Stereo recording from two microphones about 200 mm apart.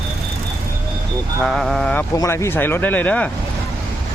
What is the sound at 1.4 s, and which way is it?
Speech, centre (ahead or behind).